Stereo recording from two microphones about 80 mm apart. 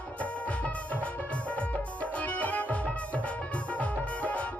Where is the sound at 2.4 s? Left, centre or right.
Centre.